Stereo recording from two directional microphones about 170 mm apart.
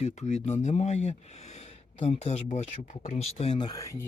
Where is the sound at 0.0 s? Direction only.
45° left (ahead or behind).